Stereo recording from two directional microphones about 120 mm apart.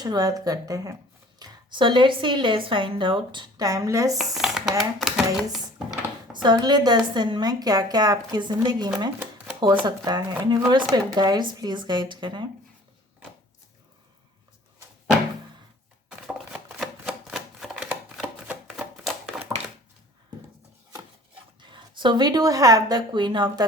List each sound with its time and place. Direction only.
0.0 s a woman's voice: 30° right (ahead or behind)
1.4 s speech: 40° right (ahead or behind)
3.6 s a woman's voice: 30° right (ahead or behind)
4.2 s speech: 5° right (ahead or behind)
6.3 s a woman's voice: 40° right (ahead or behind)
16.0 s typewriter: 5° right (ahead or behind)
19.0 s a sound: centre (ahead or behind)
21.6 s speech: 40° right (ahead or behind)